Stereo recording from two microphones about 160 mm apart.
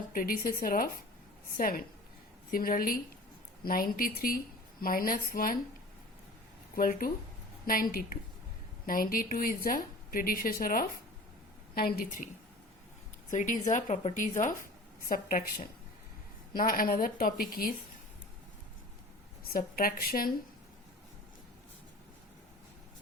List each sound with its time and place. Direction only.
0.1 s a woman's voice: 65° left (ahead or behind)
6.7 s a woman's voice: 65° left (ahead or behind)
13.3 s a woman's voice: 55° left (ahead or behind)
15.1 s a woman's voice: 65° left (ahead or behind)
19.5 s a woman's voice: 65° left (ahead or behind)